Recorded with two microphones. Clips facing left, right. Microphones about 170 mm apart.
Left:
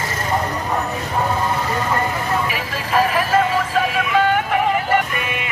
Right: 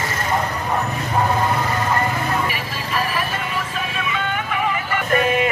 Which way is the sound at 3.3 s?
75° left (ahead or behind).